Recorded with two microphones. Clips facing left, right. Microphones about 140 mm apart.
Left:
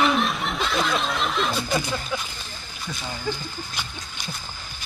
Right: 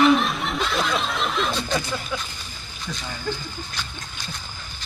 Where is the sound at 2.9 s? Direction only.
10° left (ahead or behind).